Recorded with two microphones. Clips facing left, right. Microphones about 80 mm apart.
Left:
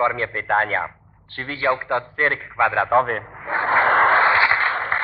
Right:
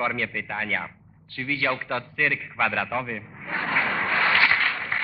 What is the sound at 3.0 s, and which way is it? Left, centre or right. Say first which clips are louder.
Speech: left 10 dB; left.